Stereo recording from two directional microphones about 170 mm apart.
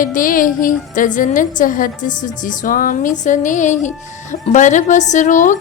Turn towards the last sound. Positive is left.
turn(degrees=50)  # may be behind; listen again after turning